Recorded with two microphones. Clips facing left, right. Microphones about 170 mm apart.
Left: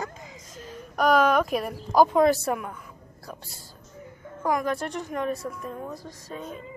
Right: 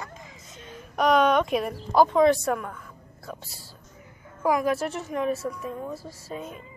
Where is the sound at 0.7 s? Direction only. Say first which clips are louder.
Even; centre (ahead or behind).